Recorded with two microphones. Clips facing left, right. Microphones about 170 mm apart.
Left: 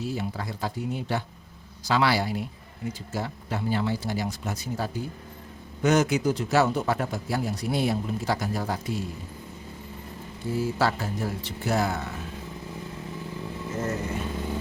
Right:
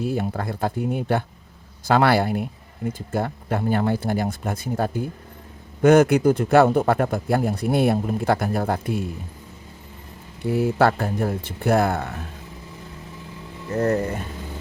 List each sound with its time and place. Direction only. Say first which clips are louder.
0.0 s speech: right 6 dB; 55° right (ahead or behind)
10.4 s speech: right 7 dB; 65° right (ahead or behind)
13.7 s speech: right 10 dB; 65° right (ahead or behind)